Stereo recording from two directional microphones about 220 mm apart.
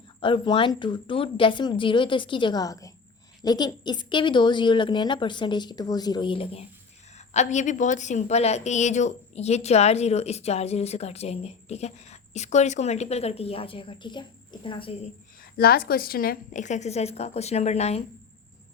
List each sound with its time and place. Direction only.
0.2 s a woman's voice: 20° left (ahead or behind)
15.4 s a woman's voice: 45° left (ahead or behind)